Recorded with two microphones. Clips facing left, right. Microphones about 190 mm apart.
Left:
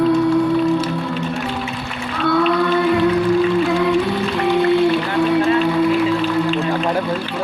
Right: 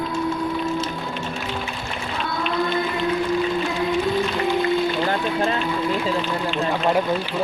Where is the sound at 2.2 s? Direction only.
70° left (ahead or behind).